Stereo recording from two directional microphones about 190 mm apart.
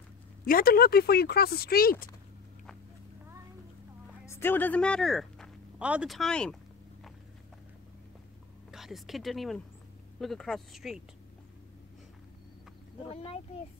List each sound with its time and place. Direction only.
0.5 s speech: 50° left (ahead or behind)
4.3 s speech: 10° left (ahead or behind)
8.7 s speech: centre (ahead or behind)
13.1 s a child's voice: 30° left (ahead or behind)